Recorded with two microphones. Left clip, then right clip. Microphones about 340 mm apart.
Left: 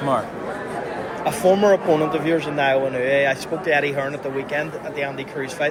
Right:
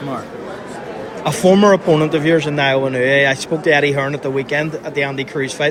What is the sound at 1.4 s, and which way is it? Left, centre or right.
Speech, right.